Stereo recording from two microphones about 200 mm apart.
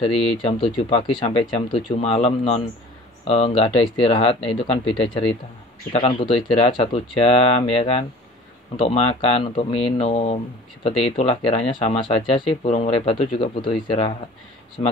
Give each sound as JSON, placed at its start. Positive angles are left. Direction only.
{"t": 0.0, "sound": "speech", "side_deg": 25}